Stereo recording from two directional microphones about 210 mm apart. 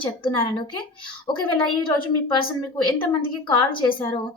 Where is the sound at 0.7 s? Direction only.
20° left (ahead or behind).